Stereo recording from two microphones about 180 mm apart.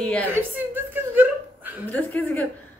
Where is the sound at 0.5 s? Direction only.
10° right (ahead or behind).